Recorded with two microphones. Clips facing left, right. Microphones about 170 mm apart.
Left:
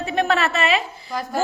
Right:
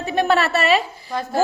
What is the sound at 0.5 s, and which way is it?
Speech, 35° right (ahead or behind).